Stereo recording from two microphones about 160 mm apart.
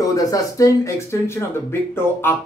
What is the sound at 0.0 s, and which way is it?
Speech, 20° left (ahead or behind).